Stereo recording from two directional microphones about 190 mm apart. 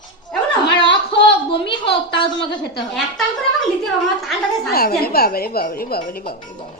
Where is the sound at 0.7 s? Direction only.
30° left (ahead or behind).